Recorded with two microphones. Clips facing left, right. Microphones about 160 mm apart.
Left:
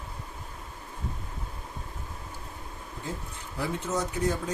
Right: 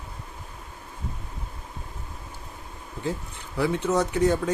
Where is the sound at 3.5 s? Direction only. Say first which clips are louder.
Right 7 dB; 70° right (ahead or behind).